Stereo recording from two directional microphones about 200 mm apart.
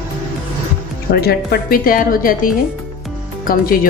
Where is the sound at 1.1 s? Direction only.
50° left (ahead or behind).